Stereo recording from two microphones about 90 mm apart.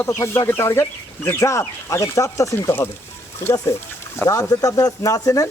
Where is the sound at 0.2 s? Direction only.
30° left (ahead or behind).